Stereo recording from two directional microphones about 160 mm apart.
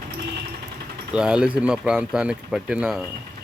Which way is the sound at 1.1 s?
5° right (ahead or behind).